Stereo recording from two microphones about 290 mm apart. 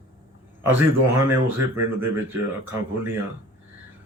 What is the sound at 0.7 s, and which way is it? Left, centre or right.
Speech, centre.